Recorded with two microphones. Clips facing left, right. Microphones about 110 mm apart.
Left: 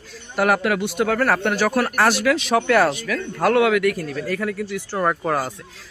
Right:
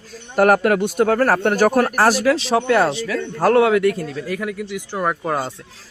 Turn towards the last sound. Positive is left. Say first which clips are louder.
# even
turn(degrees=-25)  # may be behind; listen again after turning